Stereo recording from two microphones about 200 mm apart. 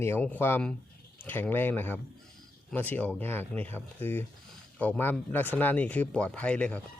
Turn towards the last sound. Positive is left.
turn(degrees=5)  # may be behind; listen again after turning